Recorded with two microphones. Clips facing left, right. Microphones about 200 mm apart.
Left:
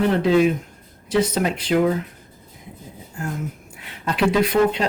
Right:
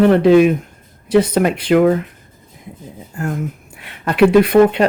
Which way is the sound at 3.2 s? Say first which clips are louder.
Right 6 dB; 60° right (ahead or behind).